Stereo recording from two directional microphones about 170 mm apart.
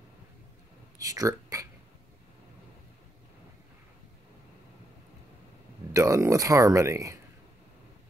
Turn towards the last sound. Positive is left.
turn(degrees=-20)  # may be behind; listen again after turning